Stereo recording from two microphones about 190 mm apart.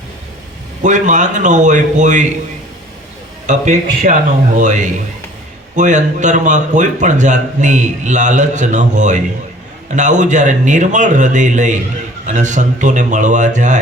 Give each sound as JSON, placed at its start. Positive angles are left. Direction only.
{"t": 0.8, "sound": "speech", "side_deg": -40}
{"t": 3.4, "sound": "speech", "side_deg": -40}